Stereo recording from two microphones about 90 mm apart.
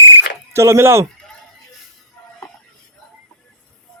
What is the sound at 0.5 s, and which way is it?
Speech, 30° right (ahead or behind).